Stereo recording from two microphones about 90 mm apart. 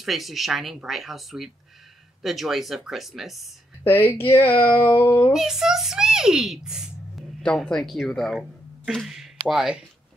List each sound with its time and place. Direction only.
0.0 s speech: centre (ahead or behind)
3.8 s speech: 25° left (ahead or behind)
5.3 s speech: 5° right (ahead or behind)
7.4 s speech: 5° left (ahead or behind)